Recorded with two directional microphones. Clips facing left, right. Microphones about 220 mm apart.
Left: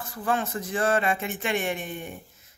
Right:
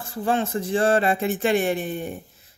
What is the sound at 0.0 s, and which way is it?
A woman's voice, 30° right (ahead or behind).